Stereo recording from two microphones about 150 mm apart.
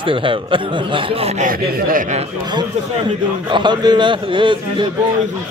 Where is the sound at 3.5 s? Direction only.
30° right (ahead or behind).